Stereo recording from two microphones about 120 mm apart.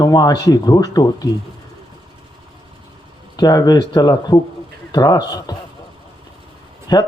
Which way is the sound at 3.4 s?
35° left (ahead or behind).